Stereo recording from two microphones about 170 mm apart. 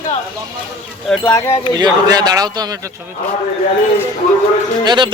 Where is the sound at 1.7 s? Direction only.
25° right (ahead or behind).